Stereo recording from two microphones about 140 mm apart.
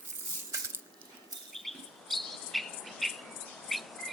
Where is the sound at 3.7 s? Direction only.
Centre (ahead or behind).